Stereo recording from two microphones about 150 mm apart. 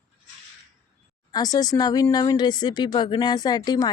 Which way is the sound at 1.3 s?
25° left (ahead or behind).